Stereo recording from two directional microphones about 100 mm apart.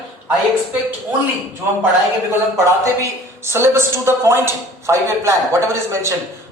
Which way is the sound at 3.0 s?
25° right (ahead or behind).